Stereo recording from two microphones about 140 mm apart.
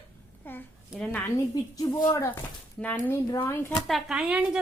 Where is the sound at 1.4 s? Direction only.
25° left (ahead or behind).